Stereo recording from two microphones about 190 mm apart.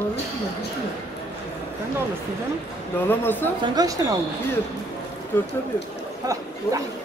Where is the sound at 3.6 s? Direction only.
20° right (ahead or behind).